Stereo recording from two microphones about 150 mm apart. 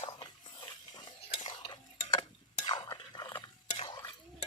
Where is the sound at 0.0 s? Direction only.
30° left (ahead or behind).